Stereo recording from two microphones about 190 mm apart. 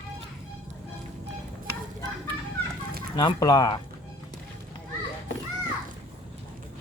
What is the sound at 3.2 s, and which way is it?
Speech, 20° left (ahead or behind).